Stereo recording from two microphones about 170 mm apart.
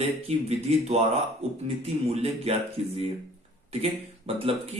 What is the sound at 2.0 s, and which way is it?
Speech, 40° right (ahead or behind).